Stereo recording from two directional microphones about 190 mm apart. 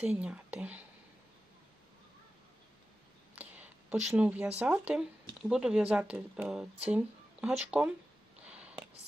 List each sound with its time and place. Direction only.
0.0 s speech: 5° right (ahead or behind)
3.3 s speech: 10° right (ahead or behind)
8.4 s a sound: 5° right (ahead or behind)